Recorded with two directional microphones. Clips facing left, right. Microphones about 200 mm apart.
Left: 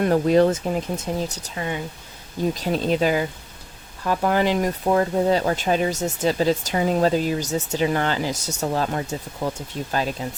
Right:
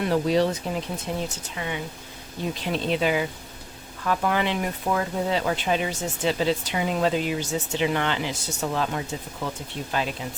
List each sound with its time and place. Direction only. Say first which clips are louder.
0.0 s speech: left 5 dB; 50° left (ahead or behind)